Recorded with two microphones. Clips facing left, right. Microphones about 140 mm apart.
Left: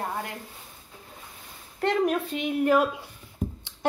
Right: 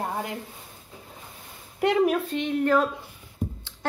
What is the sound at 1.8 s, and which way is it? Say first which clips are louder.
Speech: right 3 dB; 10° right (ahead or behind).